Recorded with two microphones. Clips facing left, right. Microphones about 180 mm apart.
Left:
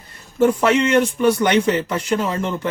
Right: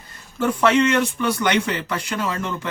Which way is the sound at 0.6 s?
30° left (ahead or behind).